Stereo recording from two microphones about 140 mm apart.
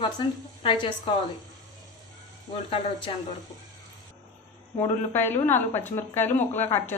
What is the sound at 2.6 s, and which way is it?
Speech, 40° left (ahead or behind).